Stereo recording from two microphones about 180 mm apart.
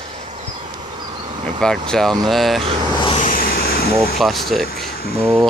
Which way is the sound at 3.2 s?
50° left (ahead or behind).